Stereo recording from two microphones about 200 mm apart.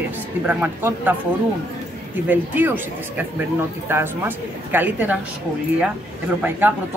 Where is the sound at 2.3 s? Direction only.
10° right (ahead or behind).